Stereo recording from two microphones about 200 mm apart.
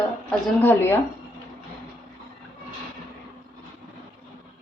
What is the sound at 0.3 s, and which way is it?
Speech, 10° left (ahead or behind).